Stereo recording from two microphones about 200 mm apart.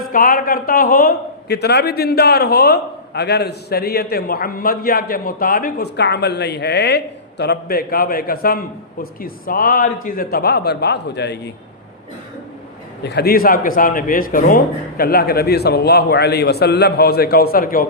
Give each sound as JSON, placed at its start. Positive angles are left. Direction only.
{"t": 0.1, "sound": "a man's voice", "side_deg": 45}
{"t": 13.0, "sound": "a man's voice", "side_deg": 55}